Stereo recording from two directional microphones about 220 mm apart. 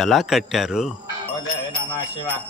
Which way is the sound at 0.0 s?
Centre (ahead or behind).